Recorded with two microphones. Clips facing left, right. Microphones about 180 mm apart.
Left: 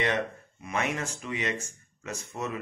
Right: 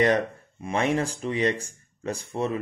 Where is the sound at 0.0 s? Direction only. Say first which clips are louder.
Right 7 dB; 35° right (ahead or behind).